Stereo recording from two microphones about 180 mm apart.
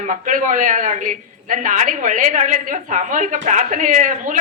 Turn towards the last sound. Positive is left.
turn(degrees=-45)  # may be behind; listen again after turning